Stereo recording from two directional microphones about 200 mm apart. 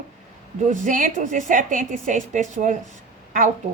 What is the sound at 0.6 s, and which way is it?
A woman's voice, 40° right (ahead or behind).